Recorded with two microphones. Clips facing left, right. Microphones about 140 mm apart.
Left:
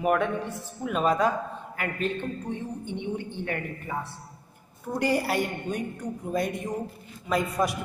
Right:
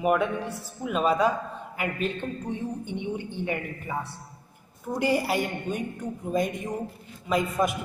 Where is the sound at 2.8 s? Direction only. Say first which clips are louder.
Even; 10° right (ahead or behind).